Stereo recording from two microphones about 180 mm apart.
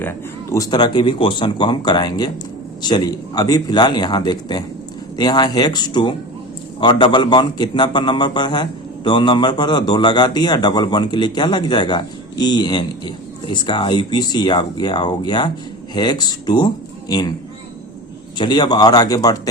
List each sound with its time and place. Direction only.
0.0 s a man's voice: 15° left (ahead or behind)
18.3 s a man's voice: 25° left (ahead or behind)